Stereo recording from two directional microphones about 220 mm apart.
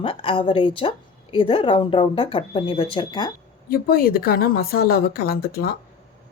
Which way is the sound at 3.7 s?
45° left (ahead or behind).